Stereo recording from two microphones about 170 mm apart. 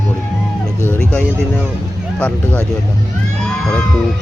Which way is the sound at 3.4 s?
5° left (ahead or behind).